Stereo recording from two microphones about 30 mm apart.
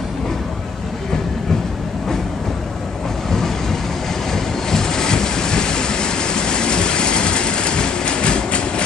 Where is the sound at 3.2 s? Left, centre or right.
Centre; by 8.8 s left.